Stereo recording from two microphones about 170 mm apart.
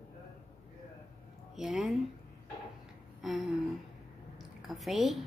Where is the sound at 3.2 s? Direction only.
Centre (ahead or behind).